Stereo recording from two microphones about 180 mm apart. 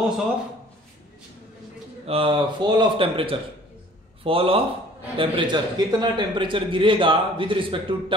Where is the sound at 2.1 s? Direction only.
30° right (ahead or behind).